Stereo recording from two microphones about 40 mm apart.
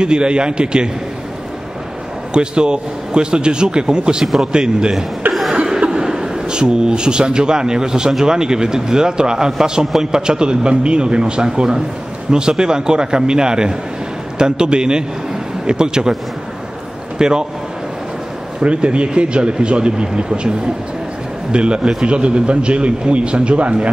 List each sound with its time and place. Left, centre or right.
0.0 s a man's voice: right
2.3 s a man's voice: right
17.2 s a man's voice: centre
18.6 s a man's voice: right